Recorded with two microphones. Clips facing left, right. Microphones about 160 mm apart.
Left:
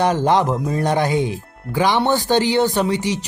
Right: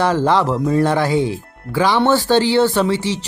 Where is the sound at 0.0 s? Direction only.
20° left (ahead or behind).